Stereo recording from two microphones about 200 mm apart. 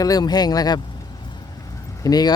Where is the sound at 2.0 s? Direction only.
20° left (ahead or behind).